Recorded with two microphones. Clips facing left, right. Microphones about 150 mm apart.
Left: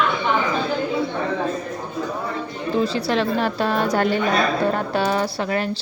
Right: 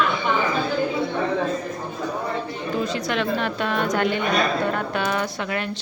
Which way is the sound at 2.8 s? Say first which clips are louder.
Left 4 dB; 30° left (ahead or behind).